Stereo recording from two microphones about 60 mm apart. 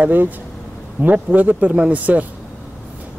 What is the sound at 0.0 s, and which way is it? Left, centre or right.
Speech, right.